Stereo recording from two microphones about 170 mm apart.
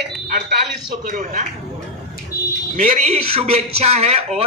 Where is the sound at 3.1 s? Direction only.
35° right (ahead or behind).